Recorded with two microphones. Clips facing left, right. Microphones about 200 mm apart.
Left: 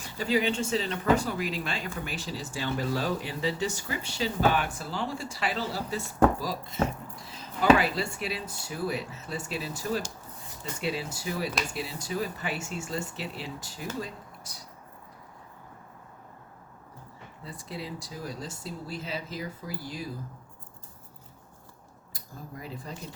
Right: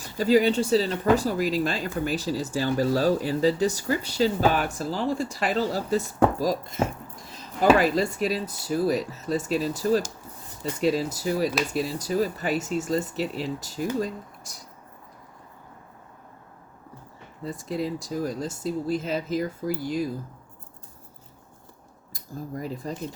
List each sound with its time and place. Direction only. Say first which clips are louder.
0.2 s speech: right 7 dB; 40° right (ahead or behind)
17.4 s speech: right 10 dB; 45° right (ahead or behind)
22.1 s speech: right 9 dB; 40° right (ahead or behind)